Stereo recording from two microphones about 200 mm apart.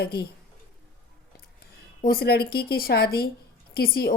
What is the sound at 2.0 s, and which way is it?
Speech, 50° left (ahead or behind).